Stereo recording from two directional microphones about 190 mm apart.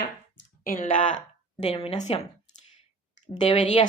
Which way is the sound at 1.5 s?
30° left (ahead or behind).